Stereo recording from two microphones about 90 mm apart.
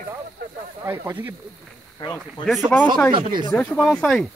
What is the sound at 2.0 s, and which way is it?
Speech, 55° left (ahead or behind).